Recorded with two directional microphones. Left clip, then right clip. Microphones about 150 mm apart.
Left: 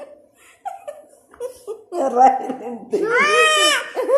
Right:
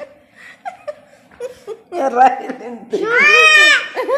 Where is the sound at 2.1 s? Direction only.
55° right (ahead or behind).